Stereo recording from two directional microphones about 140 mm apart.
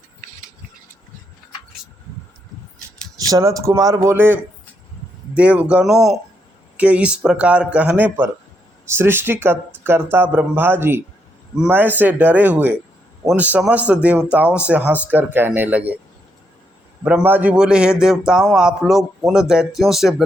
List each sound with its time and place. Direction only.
3.2 s speech: 25° right (ahead or behind)
17.0 s a man's voice: 10° right (ahead or behind)